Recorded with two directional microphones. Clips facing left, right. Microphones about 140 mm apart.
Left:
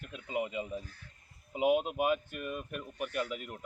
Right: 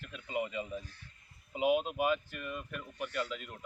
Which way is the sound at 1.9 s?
50° left (ahead or behind).